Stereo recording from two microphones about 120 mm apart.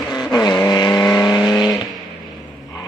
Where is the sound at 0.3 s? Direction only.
35° left (ahead or behind).